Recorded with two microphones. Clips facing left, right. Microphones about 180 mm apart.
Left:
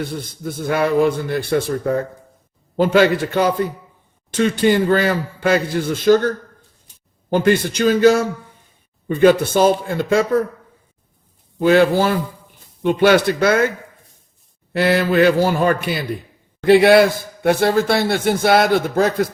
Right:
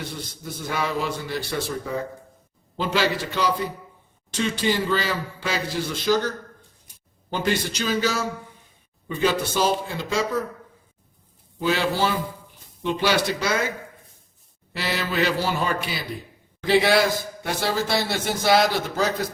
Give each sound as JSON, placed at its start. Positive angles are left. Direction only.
{"t": 0.4, "sound": "a man's voice", "side_deg": 55}
{"t": 11.6, "sound": "a man's voice", "side_deg": 55}
{"t": 14.7, "sound": "a man's voice", "side_deg": 55}